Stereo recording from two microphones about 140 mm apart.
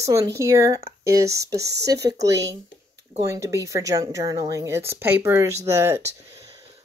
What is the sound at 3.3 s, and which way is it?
Speech, 20° right (ahead or behind).